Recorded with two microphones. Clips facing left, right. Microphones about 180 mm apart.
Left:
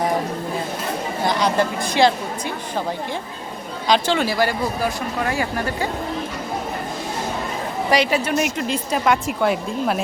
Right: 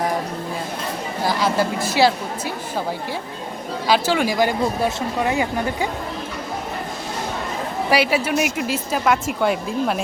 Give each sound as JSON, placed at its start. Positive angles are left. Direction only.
{"t": 1.2, "sound": "a woman's voice", "side_deg": -5}
{"t": 3.8, "sound": "speech", "side_deg": -5}
{"t": 7.9, "sound": "a woman's voice", "side_deg": -10}